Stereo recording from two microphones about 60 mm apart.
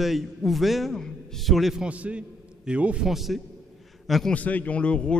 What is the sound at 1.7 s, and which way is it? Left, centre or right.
A man's voice, right.